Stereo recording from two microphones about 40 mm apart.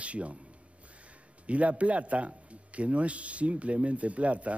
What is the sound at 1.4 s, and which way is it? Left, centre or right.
Speech, right.